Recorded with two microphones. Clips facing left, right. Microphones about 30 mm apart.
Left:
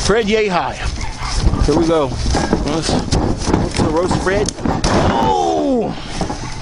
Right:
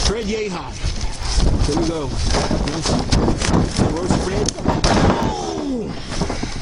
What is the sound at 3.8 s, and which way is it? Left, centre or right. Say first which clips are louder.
Speech: left 4 dB; left.